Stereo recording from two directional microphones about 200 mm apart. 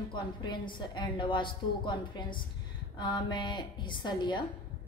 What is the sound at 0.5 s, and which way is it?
A woman's voice, 25° left (ahead or behind).